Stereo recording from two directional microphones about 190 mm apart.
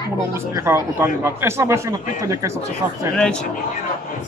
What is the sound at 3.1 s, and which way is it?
Speech, 5° left (ahead or behind).